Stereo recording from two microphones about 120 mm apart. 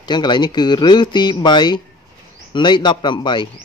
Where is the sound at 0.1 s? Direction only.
35° left (ahead or behind).